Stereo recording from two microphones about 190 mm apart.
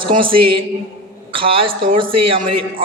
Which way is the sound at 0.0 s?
25° right (ahead or behind).